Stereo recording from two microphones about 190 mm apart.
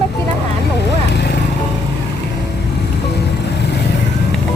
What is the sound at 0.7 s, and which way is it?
Vehicle, 60° left (ahead or behind).